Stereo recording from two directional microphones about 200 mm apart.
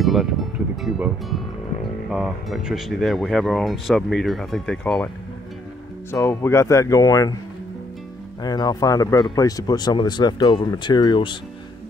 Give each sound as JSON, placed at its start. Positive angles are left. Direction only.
{"t": 0.0, "sound": "speech", "side_deg": 0}
{"t": 6.1, "sound": "speech", "side_deg": 15}
{"t": 8.4, "sound": "speech", "side_deg": 20}